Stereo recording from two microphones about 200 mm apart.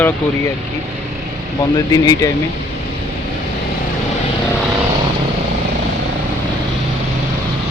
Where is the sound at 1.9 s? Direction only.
20° left (ahead or behind).